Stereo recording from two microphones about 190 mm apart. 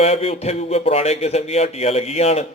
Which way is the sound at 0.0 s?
35° left (ahead or behind).